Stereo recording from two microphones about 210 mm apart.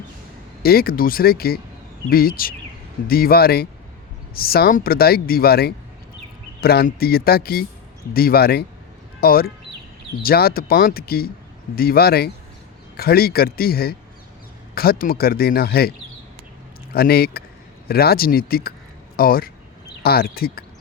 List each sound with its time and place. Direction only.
0.6 s speech: 45° left (ahead or behind)
16.9 s speech: 45° left (ahead or behind)